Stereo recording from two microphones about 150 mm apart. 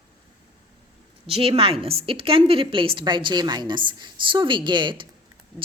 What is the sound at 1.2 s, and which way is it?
A woman's voice, 40° right (ahead or behind).